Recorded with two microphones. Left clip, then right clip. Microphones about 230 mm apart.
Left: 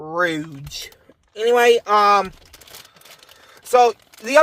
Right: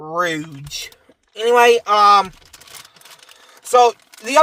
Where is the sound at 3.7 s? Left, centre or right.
Right.